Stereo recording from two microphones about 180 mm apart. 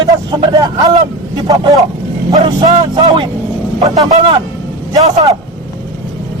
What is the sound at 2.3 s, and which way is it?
Speech, 20° right (ahead or behind).